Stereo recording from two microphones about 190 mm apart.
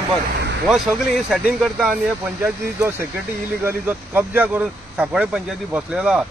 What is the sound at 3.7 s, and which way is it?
Speech, 10° right (ahead or behind).